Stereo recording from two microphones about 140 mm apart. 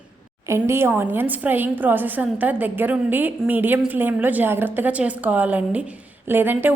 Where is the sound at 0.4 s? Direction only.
20° right (ahead or behind).